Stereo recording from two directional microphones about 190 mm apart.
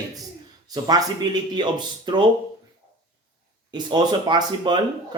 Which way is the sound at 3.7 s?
25° right (ahead or behind).